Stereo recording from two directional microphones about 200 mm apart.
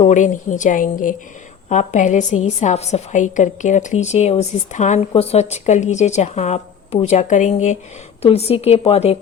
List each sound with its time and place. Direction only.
0.0 s a woman's voice: 40° left (ahead or behind)